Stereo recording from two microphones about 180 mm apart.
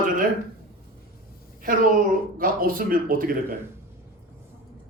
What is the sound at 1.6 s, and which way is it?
A man's voice, 50° right (ahead or behind).